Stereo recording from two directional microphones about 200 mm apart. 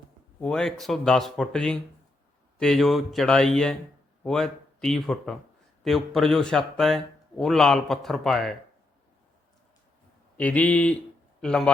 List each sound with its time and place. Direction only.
0.3 s speech: 5° left (ahead or behind)
10.3 s speech: 5° left (ahead or behind)